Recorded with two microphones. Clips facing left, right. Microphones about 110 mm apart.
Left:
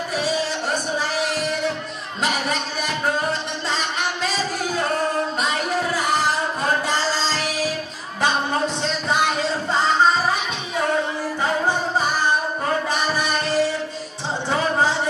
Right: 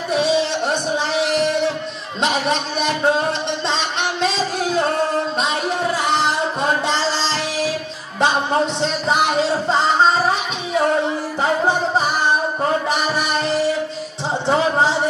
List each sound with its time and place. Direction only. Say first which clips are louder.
0.1 s music: right 7 dB; 25° right (ahead or behind)
2.2 s music: right 4 dB; 25° right (ahead or behind)
8.8 s music: right 3 dB; 20° right (ahead or behind)